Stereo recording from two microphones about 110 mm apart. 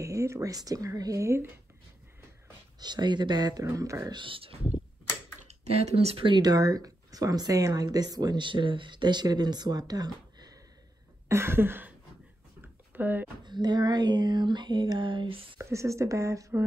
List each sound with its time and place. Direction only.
0.0 s speech: 30° right (ahead or behind)
2.8 s speech: 40° right (ahead or behind)
3.6 s speech: 30° right (ahead or behind)
4.1 s speech: 50° right (ahead or behind)
5.7 s speech: 70° right (ahead or behind); by 10.5 s 35° right (ahead or behind)
11.2 s a sound: 25° right (ahead or behind)
12.9 s speech: 15° right (ahead or behind)
13.4 s speech: 40° right (ahead or behind)
15.5 s speech: 25° right (ahead or behind)